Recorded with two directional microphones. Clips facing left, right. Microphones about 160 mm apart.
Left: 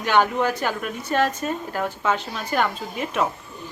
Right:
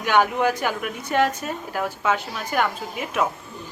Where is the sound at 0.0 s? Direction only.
10° right (ahead or behind).